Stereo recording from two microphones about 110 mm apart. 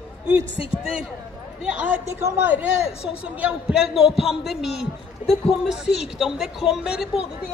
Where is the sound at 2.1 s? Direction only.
20° right (ahead or behind).